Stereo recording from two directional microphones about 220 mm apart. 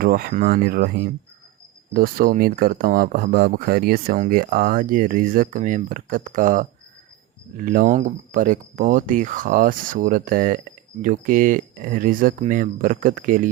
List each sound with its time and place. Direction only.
0.0 s speech: 45° right (ahead or behind)